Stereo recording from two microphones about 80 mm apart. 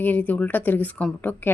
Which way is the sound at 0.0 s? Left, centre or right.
Left.